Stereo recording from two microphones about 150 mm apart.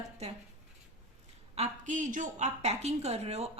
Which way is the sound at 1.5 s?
55° right (ahead or behind).